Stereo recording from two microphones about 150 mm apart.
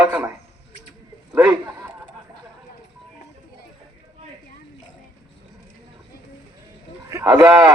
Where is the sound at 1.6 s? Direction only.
25° right (ahead or behind).